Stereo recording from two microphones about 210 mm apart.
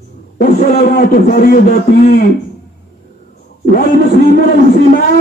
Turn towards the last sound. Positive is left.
turn(degrees=45)  # may be behind; listen again after turning